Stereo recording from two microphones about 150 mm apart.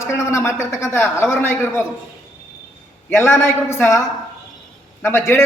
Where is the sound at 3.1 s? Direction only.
15° left (ahead or behind).